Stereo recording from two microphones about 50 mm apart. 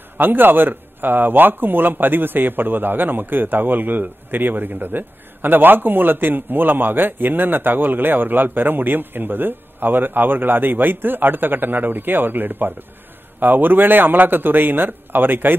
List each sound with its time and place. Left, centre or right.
0.2 s a man's voice: right